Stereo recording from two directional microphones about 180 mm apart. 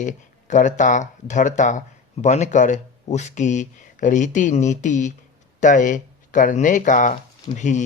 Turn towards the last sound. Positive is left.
turn(degrees=40)  # may be behind; listen again after turning